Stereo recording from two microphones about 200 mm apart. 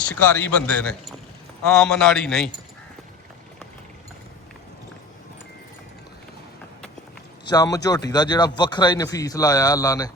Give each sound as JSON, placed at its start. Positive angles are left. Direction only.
{"t": 0.3, "sound": "a man's voice", "side_deg": 10}
{"t": 7.4, "sound": "a man's voice", "side_deg": 20}